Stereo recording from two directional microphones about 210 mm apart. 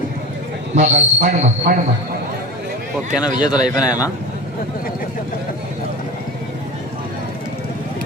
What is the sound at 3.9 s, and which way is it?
Speech, 15° left (ahead or behind).